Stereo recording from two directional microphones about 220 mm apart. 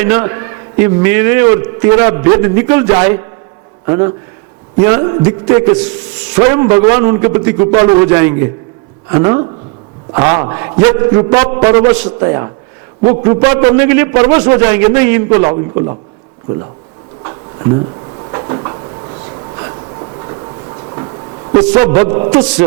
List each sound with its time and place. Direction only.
0.0 s a man's voice: 15° right (ahead or behind)
10.5 s a man's voice: 15° right (ahead or behind)
17.2 s cupboard open or close: 25° right (ahead or behind)
19.5 s train: 25° right (ahead or behind)
22.0 s a man's voice: 15° right (ahead or behind)